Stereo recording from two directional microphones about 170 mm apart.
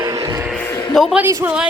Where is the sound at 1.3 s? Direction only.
15° right (ahead or behind).